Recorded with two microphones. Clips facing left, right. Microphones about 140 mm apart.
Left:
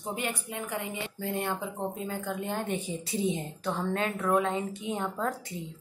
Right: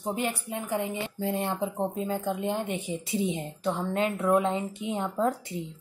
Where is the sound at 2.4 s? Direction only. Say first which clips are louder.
Right 2 dB; 20° right (ahead or behind).